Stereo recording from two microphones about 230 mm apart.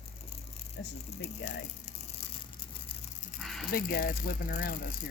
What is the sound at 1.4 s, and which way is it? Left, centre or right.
Speech, left.